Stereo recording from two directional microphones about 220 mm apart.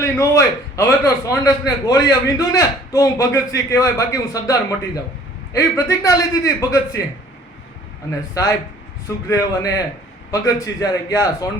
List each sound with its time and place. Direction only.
0.0 s a man's voice: 15° left (ahead or behind)
9.0 s a man's voice: 15° left (ahead or behind)